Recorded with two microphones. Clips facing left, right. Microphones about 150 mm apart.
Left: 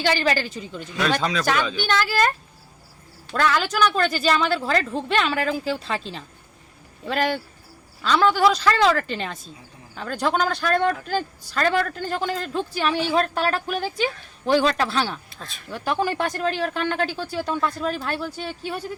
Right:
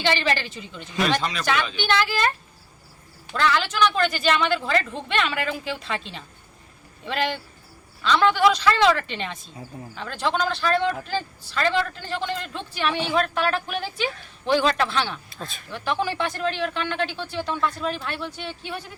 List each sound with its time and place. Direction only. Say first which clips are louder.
0.0 s a woman's voice: left 2 dB; 40° left (ahead or behind)
3.3 s a woman's voice: left 1 dB; 45° left (ahead or behind)
15.3 s speech: right 4 dB; centre (ahead or behind)
15.7 s a woman's voice: left 2 dB; 45° left (ahead or behind)